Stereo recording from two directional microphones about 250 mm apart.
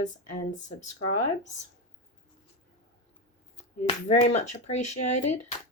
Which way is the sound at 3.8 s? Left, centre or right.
Left.